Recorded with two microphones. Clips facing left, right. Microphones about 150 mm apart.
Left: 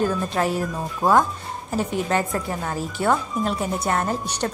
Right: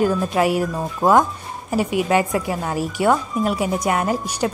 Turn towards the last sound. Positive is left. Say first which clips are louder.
# right 4 dB
turn(degrees=-10)  # may be behind; listen again after turning